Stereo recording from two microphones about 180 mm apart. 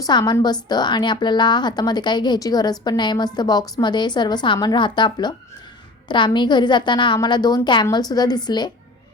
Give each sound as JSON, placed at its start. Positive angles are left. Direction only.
{"t": 0.0, "sound": "a woman's voice", "side_deg": 25}